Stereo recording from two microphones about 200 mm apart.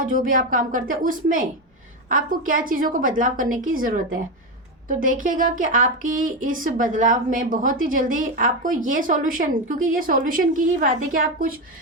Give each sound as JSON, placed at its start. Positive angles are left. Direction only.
{"t": 0.0, "sound": "a woman's voice", "side_deg": -40}